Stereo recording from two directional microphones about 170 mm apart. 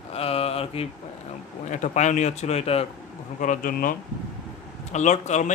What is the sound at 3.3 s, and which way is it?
Speech, 50° left (ahead or behind).